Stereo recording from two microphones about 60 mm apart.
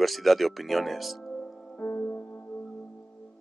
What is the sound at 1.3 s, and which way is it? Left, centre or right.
Music, centre.